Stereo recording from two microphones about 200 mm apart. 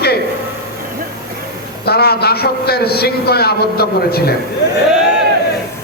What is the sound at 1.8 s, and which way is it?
A man's voice, 50° left (ahead or behind).